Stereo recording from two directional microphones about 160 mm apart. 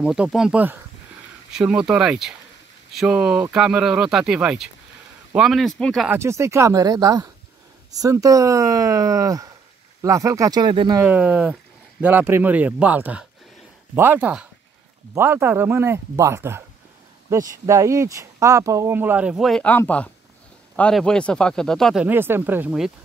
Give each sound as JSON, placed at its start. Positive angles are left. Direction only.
{"t": 0.0, "sound": "speech", "side_deg": -5}
{"t": 6.0, "sound": "speech", "side_deg": -15}
{"t": 11.0, "sound": "speech", "side_deg": -10}
{"t": 22.0, "sound": "speech", "side_deg": -15}